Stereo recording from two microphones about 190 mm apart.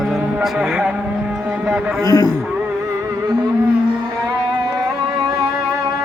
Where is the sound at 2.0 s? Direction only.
20° left (ahead or behind).